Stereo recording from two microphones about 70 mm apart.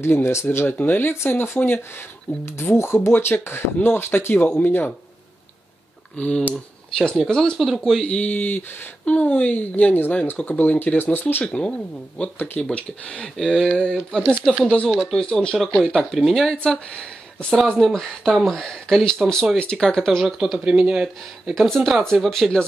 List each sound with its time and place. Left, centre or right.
0.0 s speech: left
6.1 s speech: centre
8.1 s speech: left
11.4 s speech: centre
16.6 s speech: centre
20.5 s speech: centre
21.5 s speech: centre